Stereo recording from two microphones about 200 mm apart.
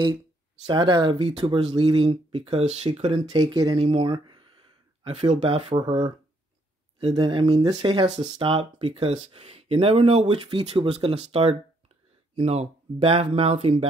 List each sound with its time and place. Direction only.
0.7 s speech: 25° right (ahead or behind)